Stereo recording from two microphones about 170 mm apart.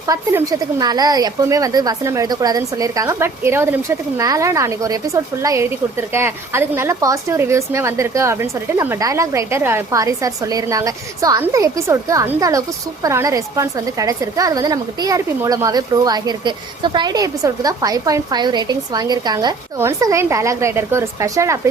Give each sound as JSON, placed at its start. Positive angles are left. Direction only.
{"t": 0.1, "sound": "a woman's voice", "side_deg": -20}